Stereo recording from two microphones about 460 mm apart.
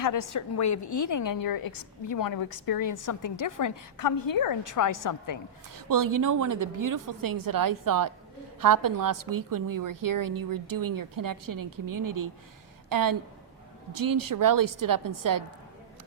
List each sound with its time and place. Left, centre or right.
0.0 s a woman's voice: left
5.7 s a woman's voice: right